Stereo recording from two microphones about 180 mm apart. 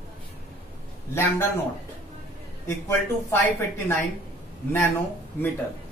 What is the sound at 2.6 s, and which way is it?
Speech, 15° left (ahead or behind).